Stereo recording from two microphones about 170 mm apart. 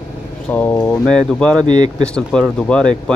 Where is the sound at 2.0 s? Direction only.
5° left (ahead or behind).